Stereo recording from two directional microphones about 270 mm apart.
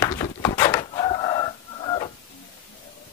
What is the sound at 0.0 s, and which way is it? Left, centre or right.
Chicken, centre.